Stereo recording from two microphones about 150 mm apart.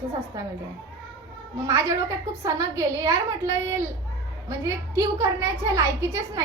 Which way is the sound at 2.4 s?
20° right (ahead or behind).